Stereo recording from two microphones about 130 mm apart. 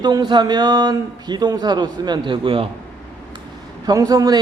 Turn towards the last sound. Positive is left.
turn(degrees=-30)  # may be behind; listen again after turning